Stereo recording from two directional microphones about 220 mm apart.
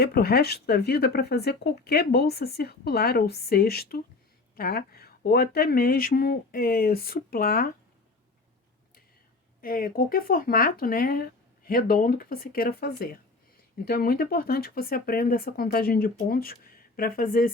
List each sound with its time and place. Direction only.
0.0 s speech: 45° left (ahead or behind)
9.6 s speech: 40° left (ahead or behind)